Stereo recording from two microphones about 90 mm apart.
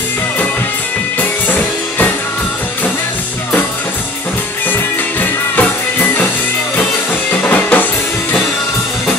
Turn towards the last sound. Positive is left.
turn(degrees=20)  # may be behind; listen again after turning